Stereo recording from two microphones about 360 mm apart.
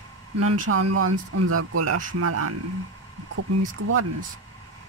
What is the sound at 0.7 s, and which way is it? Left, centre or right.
Speech, right.